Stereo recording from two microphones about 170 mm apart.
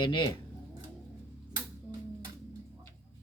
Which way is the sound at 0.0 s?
30° left (ahead or behind).